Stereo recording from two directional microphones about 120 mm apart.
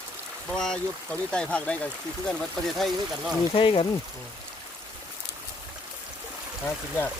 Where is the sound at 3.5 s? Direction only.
45° left (ahead or behind).